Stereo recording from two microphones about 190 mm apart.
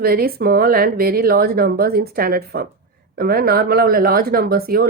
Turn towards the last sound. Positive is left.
turn(degrees=-50)  # may be behind; listen again after turning